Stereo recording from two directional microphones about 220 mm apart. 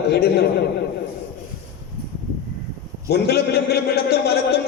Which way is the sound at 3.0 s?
45° left (ahead or behind).